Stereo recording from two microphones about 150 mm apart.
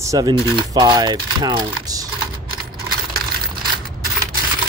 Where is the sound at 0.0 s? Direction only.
20° right (ahead or behind).